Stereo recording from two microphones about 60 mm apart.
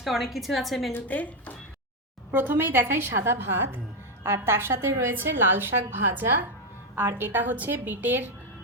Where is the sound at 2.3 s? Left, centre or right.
Right.